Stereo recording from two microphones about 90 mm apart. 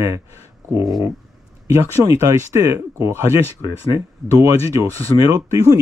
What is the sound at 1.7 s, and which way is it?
Speech, 35° right (ahead or behind).